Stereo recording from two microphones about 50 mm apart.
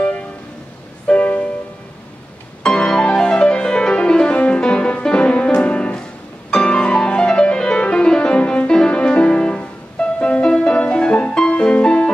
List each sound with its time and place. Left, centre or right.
1.0 s music: left
2.6 s music: centre